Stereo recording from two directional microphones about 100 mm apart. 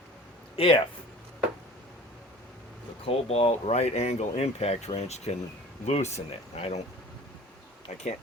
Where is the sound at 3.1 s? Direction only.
85° left.